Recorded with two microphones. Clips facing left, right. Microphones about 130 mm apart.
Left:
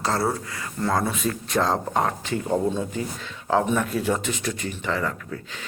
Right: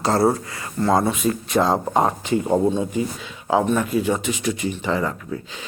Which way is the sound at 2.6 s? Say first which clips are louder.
Right 5 dB; 10° right (ahead or behind).